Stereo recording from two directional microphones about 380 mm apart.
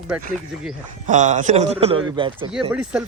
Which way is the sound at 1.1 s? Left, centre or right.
Centre.